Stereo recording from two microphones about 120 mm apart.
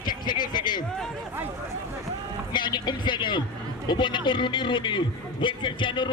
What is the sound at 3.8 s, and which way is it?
A man's voice, 40° left (ahead or behind).